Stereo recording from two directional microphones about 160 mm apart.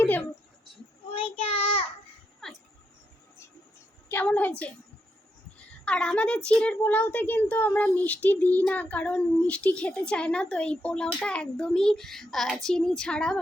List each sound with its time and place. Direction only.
0.0 s a sound: 10° left (ahead or behind)
1.1 s child singing: 35° left (ahead or behind)
2.4 s dog: centre (ahead or behind)
4.1 s a woman's voice: 10° left (ahead or behind)
5.8 s a child's voice: 5° left (ahead or behind)